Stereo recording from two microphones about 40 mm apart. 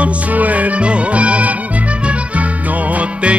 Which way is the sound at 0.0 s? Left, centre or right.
Right.